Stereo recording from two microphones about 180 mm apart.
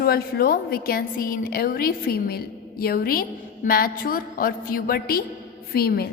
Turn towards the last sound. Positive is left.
turn(degrees=60)  # may be behind; listen again after turning